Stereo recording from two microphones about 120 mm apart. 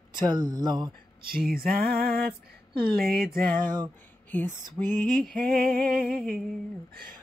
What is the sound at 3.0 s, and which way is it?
Music, 5° right (ahead or behind).